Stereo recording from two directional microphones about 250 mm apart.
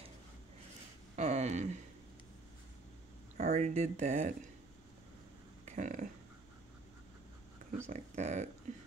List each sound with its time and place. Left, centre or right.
1.1 s speech: right
3.3 s speech: right
5.7 s a sound: right
7.8 s speech: right